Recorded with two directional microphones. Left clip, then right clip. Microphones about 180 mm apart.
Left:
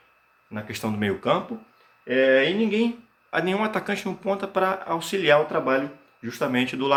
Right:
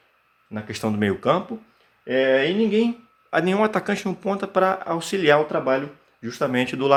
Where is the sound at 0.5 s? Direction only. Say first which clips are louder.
Right 3 dB; 45° right (ahead or behind).